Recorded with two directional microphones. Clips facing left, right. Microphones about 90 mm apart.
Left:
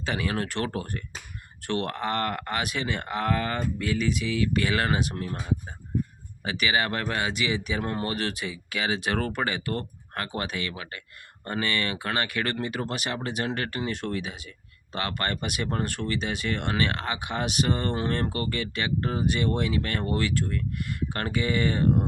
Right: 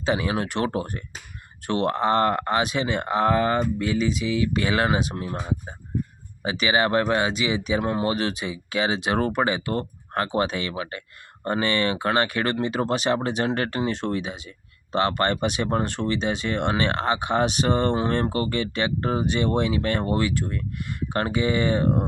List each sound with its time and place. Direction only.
0.0 s speech: 20° right (ahead or behind)
5.4 s a man's voice: 35° right (ahead or behind)
6.4 s speech: 25° right (ahead or behind)